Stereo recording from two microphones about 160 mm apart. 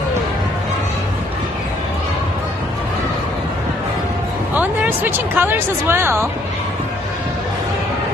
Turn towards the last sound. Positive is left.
turn(degrees=-15)  # may be behind; listen again after turning